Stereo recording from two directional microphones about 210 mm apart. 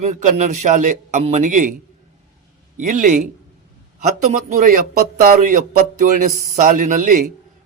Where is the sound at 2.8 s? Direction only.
40° right (ahead or behind).